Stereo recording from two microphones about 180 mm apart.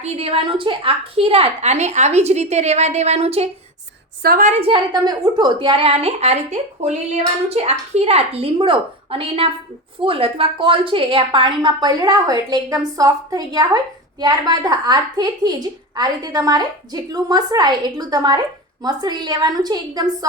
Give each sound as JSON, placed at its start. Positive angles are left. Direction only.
{"t": 0.0, "sound": "a woman's voice", "side_deg": -35}
{"t": 4.2, "sound": "a woman's voice", "side_deg": -50}